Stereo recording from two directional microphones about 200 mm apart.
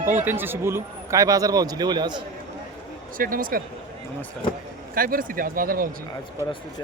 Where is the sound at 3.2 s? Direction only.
45° right (ahead or behind).